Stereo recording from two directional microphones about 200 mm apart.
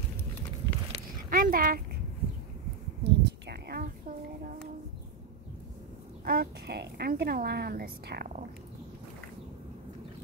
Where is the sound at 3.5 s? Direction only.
50° right (ahead or behind).